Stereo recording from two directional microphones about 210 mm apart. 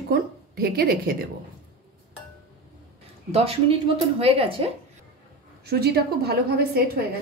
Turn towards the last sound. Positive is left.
turn(degrees=-50)  # may be behind; listen again after turning